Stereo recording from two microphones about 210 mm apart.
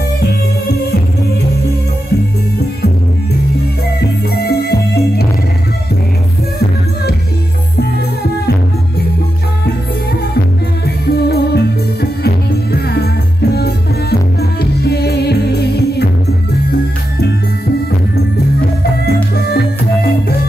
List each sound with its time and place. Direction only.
4.4 s music: 50° left (ahead or behind)
11.1 s music: 50° left (ahead or behind)
19.3 s music: 45° left (ahead or behind)